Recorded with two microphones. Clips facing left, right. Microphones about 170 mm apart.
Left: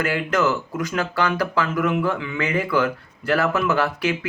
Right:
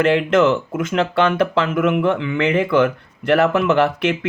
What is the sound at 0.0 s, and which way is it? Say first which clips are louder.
Speech: right 7 dB; 25° right (ahead or behind).